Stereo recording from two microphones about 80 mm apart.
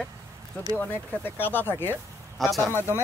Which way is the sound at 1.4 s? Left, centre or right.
Left.